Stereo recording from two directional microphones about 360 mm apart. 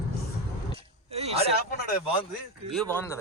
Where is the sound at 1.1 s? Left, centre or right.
Centre.